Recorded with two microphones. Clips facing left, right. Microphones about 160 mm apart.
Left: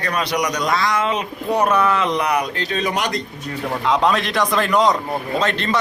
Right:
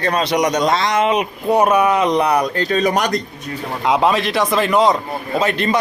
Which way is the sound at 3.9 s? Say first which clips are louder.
Right 3 dB; 5° right (ahead or behind).